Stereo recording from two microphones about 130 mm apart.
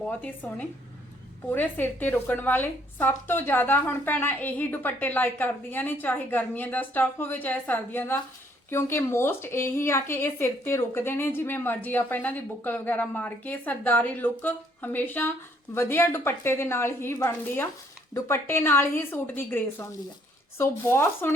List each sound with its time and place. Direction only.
0.0 s a woman's voice: 10° left (ahead or behind)